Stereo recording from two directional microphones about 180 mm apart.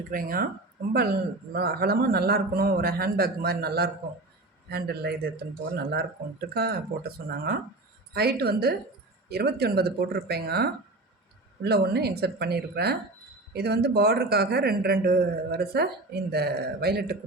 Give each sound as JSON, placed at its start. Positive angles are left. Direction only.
{"t": 0.1, "sound": "speech", "side_deg": -50}
{"t": 1.5, "sound": "speech", "side_deg": -60}